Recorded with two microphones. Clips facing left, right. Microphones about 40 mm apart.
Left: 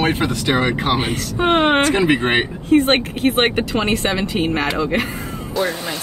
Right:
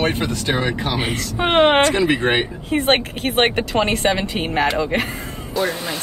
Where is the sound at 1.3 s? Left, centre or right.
Centre.